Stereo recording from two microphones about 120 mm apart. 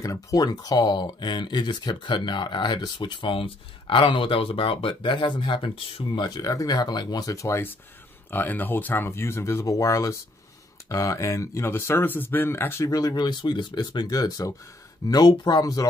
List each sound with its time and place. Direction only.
0.0 s speech: 30° left (ahead or behind)